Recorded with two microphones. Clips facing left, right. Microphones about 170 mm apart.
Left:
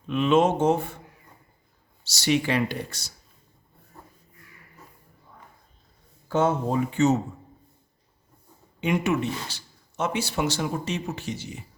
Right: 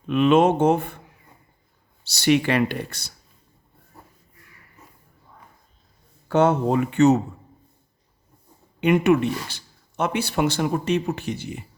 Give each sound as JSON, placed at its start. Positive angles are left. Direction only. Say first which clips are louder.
{"t": 0.1, "sound": "speech", "louder": "right 4 dB", "side_deg": -60}
{"t": 2.0, "sound": "speech", "louder": "right 4 dB", "side_deg": -60}
{"t": 6.2, "sound": "speech", "louder": "right 5 dB", "side_deg": -70}
{"t": 8.8, "sound": "speech", "louder": "right 6 dB", "side_deg": -60}